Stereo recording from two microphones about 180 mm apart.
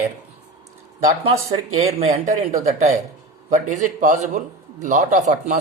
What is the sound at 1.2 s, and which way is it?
A man's voice, 35° right (ahead or behind).